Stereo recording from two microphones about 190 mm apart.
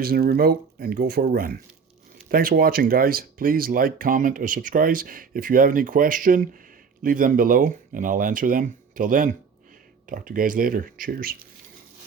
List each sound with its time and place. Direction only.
0.0 s speech: 50° right (ahead or behind)